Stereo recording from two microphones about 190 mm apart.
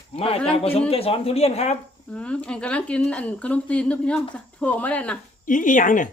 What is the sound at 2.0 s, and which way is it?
Speech, 5° left (ahead or behind).